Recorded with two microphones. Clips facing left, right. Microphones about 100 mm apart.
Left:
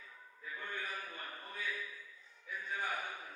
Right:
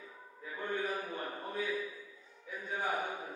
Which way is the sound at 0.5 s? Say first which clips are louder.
Right 8 dB; 30° right (ahead or behind).